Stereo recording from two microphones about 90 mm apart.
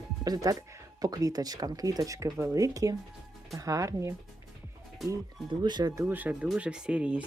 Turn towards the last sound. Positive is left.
turn(degrees=-15)  # may be behind; listen again after turning